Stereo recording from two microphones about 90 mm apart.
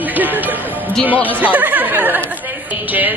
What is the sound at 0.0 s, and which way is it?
A woman's voice, 20° right (ahead or behind).